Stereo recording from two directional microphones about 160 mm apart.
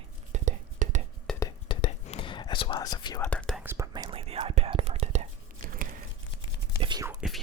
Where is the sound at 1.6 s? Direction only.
35° left (ahead or behind).